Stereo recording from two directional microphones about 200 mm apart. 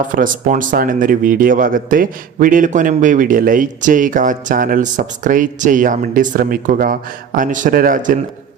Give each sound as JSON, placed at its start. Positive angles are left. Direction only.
{"t": 0.2, "sound": "speech", "side_deg": -40}